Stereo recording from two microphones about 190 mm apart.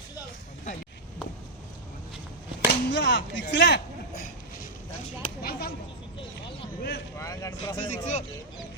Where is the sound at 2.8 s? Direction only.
65° left (ahead or behind).